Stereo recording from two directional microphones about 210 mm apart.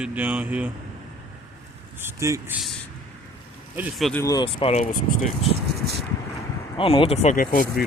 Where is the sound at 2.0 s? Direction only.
10° right (ahead or behind).